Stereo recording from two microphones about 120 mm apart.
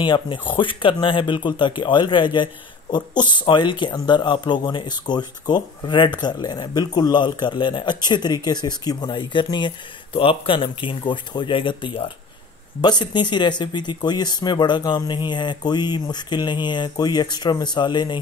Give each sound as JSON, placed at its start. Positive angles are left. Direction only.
{"t": 0.0, "sound": "a man's voice", "side_deg": 40}